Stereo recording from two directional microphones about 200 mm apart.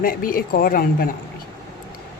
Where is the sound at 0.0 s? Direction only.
45° left (ahead or behind).